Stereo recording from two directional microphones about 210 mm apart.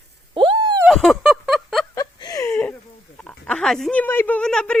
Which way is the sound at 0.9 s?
Centre (ahead or behind).